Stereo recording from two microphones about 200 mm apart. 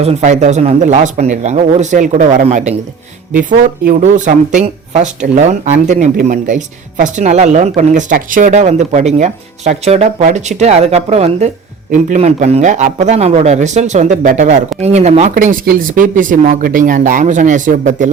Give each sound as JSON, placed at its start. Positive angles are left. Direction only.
{"t": 0.0, "sound": "speech", "side_deg": -35}